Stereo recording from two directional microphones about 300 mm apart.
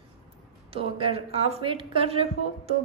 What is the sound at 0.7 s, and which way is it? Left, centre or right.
Speech, centre.